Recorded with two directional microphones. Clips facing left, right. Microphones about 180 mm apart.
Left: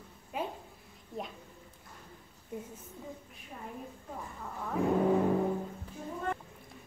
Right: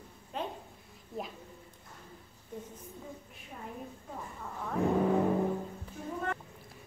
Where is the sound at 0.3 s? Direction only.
10° left (ahead or behind).